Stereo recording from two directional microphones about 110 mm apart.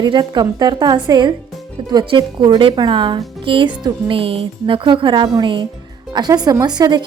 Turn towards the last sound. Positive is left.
turn(degrees=-40)  # may be behind; listen again after turning